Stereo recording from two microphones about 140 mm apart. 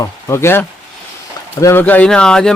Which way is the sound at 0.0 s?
20° left (ahead or behind).